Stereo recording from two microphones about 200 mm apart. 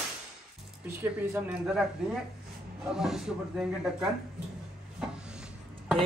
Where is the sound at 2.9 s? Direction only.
5° right (ahead or behind).